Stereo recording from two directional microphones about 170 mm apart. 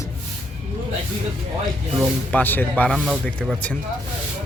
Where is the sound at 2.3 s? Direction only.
10° left (ahead or behind).